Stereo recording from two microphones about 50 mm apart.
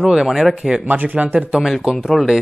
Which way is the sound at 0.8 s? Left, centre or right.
Right.